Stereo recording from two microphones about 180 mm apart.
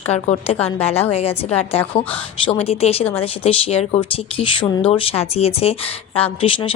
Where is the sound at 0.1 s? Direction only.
35° left (ahead or behind).